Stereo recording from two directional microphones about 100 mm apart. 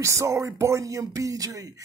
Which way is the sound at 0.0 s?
30° right (ahead or behind).